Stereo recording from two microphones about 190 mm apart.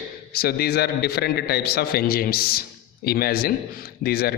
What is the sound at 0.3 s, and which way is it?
A man's voice, 55° left (ahead or behind).